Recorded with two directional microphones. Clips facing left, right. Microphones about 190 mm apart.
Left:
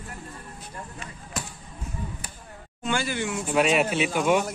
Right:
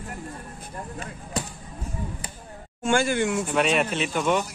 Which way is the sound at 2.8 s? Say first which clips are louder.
Right 5 dB; 50° right (ahead or behind).